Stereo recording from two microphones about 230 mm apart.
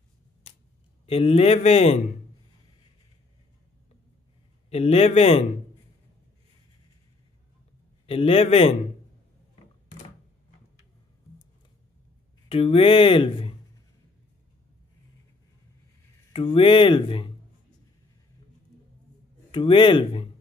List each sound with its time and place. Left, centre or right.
1.0 s speech: left
4.6 s speech: left
8.1 s speech: left
12.4 s speech: left
16.3 s speech: left
19.5 s speech: left